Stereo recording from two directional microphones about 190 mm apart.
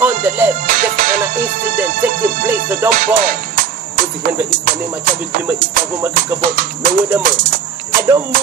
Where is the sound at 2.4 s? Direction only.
10° right (ahead or behind).